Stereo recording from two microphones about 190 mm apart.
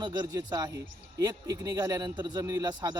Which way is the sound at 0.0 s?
20° right (ahead or behind).